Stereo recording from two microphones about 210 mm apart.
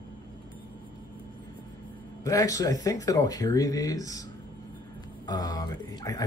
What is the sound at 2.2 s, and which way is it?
Speech, 15° left (ahead or behind).